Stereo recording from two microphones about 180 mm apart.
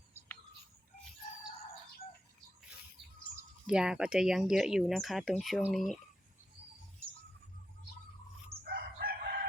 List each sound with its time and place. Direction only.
3.7 s speech: 5° right (ahead or behind)
8.6 s crowing: 55° right (ahead or behind)